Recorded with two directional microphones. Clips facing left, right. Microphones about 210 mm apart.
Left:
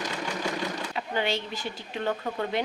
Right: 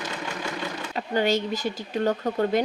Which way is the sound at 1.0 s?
45° right (ahead or behind).